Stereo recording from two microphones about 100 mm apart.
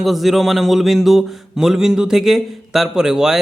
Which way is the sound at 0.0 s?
Centre (ahead or behind).